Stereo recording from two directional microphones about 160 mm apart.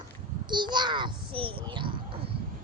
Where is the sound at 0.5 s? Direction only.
30° right (ahead or behind).